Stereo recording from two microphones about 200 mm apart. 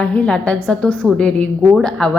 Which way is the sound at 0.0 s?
5° left (ahead or behind).